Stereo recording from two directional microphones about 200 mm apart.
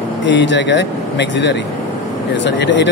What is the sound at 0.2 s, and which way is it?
A man's voice, 60° left (ahead or behind).